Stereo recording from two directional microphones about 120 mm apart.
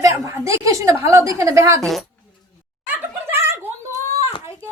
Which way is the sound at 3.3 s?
20° right (ahead or behind).